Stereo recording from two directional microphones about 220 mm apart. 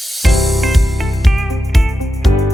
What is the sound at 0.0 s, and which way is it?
Music, centre (ahead or behind).